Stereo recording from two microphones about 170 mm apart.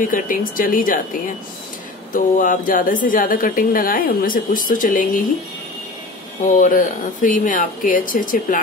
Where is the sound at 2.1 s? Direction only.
50° left (ahead or behind).